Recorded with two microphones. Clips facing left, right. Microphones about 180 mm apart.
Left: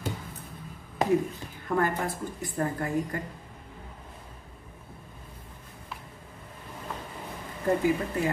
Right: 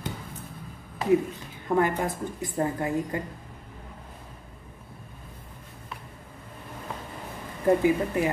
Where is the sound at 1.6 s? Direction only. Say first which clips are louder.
Right 3 dB; 15° right (ahead or behind).